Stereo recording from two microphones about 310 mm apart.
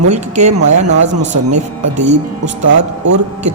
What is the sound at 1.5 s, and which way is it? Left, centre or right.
Speech, right.